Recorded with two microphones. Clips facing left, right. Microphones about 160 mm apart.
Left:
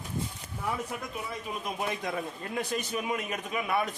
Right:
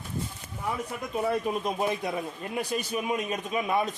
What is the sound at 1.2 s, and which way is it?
Speech, 65° right (ahead or behind).